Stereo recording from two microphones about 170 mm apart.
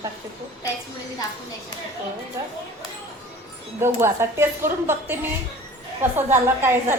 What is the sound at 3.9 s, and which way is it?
A woman's voice, 15° right (ahead or behind).